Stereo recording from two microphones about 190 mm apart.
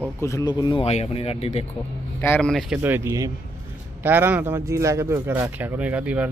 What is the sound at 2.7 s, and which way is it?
Speech, 10° right (ahead or behind).